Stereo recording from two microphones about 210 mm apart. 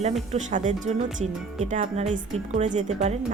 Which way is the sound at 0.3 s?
35° right (ahead or behind).